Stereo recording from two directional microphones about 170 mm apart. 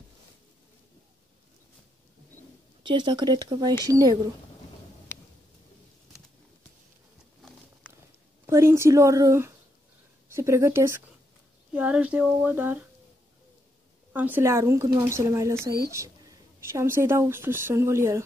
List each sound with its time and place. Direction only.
2.8 s speech: 25° right (ahead or behind)
8.5 s speech: 15° right (ahead or behind)
14.1 s speech: 10° right (ahead or behind)